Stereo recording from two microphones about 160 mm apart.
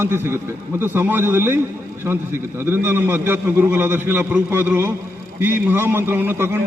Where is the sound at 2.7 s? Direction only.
15° right (ahead or behind).